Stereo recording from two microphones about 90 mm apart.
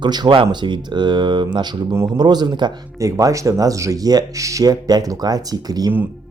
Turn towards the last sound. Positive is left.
turn(degrees=-45)  # may be behind; listen again after turning